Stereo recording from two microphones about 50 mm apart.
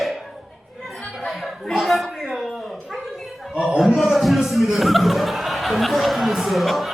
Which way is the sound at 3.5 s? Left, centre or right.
Right.